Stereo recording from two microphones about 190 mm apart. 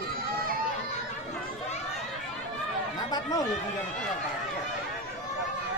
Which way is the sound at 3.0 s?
20° left (ahead or behind).